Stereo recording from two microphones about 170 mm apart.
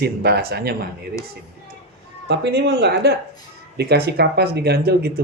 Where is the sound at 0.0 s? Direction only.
70° right (ahead or behind).